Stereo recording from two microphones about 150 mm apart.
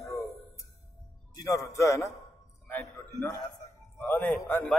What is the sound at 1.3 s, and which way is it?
Speech, 20° left (ahead or behind).